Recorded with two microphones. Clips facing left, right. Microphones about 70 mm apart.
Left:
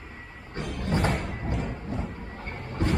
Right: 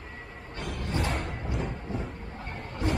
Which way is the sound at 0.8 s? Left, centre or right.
Left.